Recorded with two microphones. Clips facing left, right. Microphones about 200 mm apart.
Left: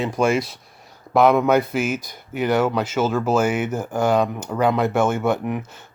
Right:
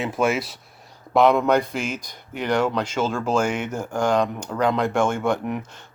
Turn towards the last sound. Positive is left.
turn(degrees=5)  # may be behind; listen again after turning